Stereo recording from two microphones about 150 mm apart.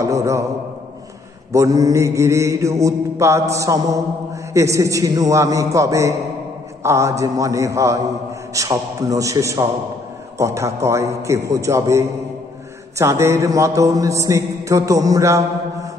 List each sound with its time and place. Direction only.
0.0 s mantra: 20° right (ahead or behind)
1.5 s mantra: 20° right (ahead or behind)